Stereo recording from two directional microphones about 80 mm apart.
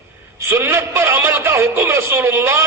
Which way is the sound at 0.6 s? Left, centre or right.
Right.